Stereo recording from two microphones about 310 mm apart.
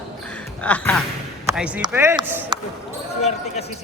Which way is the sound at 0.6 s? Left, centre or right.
Centre.